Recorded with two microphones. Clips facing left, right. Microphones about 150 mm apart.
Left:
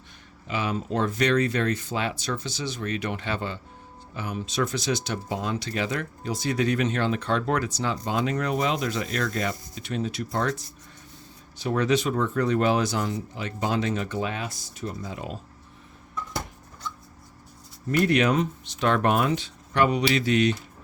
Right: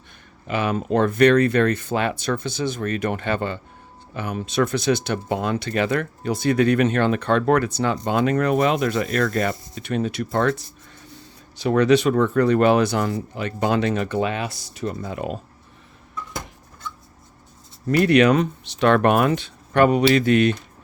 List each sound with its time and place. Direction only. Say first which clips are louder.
0.4 s speech: right 5 dB; 60° right (ahead or behind)
11.1 s speech: right 4 dB; 85° right; by 15.4 s 60° right (ahead or behind)
17.8 s speech: right 6 dB; 80° right; by 20.6 s 55° right (ahead or behind)